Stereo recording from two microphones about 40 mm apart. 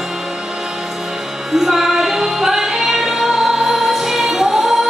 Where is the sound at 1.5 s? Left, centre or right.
Centre.